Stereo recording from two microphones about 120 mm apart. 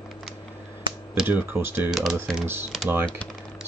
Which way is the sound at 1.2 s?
20° right (ahead or behind).